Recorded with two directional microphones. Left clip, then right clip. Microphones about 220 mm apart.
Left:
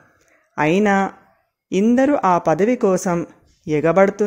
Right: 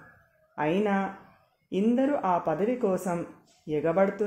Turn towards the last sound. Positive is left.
turn(degrees=45)  # may be behind; listen again after turning